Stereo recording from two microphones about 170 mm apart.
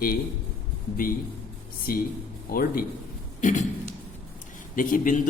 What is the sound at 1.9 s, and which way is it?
A man's voice, 55° left (ahead or behind).